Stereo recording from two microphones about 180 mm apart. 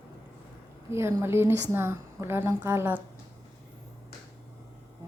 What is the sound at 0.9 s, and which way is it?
A woman's voice, 15° right (ahead or behind).